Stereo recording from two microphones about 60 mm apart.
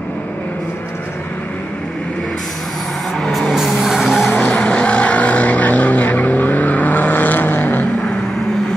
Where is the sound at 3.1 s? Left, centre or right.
Centre.